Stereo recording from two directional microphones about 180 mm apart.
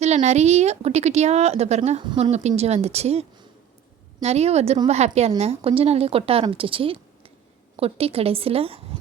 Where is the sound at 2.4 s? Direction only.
35° right (ahead or behind).